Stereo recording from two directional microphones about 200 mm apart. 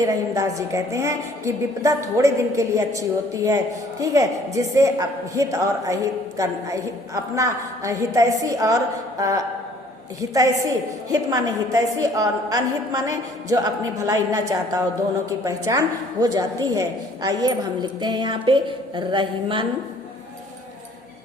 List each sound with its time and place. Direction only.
0.0 s a woman's voice: 15° right (ahead or behind)